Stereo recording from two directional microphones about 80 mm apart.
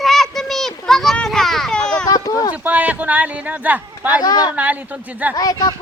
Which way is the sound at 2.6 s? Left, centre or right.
Centre.